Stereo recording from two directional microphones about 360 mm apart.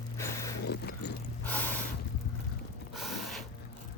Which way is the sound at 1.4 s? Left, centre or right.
Centre.